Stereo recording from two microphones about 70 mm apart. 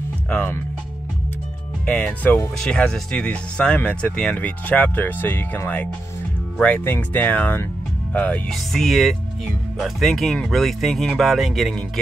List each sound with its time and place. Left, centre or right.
0.3 s speech: left
1.9 s speech: left
2.6 s speech: centre; by 5.6 s left
6.6 s speech: left
8.5 s speech: centre